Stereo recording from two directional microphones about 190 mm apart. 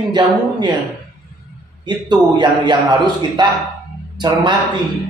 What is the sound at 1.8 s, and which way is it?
Speech, 25° right (ahead or behind).